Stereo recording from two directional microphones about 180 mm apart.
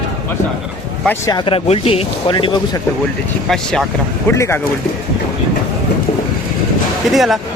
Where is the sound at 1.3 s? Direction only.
30° left (ahead or behind).